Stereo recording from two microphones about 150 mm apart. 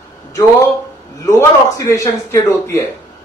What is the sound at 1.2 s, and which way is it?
A man's voice, 20° left (ahead or behind).